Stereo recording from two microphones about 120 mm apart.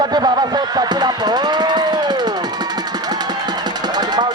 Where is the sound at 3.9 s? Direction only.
35° right (ahead or behind).